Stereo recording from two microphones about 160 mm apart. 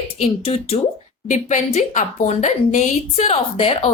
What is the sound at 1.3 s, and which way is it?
A woman's voice, 50° left (ahead or behind).